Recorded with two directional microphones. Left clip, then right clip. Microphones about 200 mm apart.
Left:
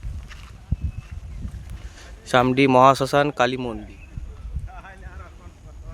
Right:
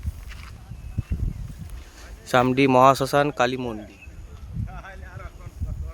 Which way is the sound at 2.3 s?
10° left (ahead or behind).